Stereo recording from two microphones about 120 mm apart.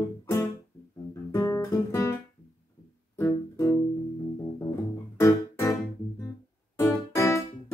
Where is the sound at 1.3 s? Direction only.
25° left (ahead or behind).